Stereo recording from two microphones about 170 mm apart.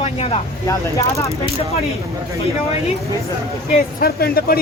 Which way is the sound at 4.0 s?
65° left (ahead or behind).